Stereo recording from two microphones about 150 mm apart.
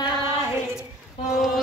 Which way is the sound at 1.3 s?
Centre (ahead or behind).